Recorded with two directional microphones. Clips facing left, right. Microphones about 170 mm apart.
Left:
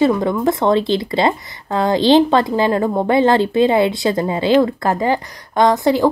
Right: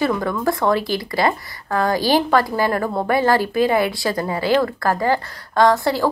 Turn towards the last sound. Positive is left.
turn(degrees=20)  # may be behind; listen again after turning